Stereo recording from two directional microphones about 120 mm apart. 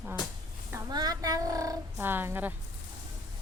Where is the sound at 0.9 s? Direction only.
35° right (ahead or behind).